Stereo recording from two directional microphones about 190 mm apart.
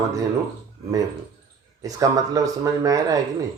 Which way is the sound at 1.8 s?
20° right (ahead or behind).